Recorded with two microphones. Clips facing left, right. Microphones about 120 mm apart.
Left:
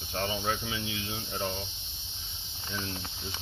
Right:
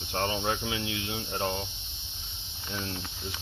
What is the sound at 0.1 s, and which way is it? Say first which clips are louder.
Hum: right 2 dB; 65° right (ahead or behind).